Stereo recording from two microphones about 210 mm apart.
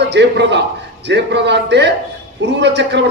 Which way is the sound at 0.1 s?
55° right (ahead or behind).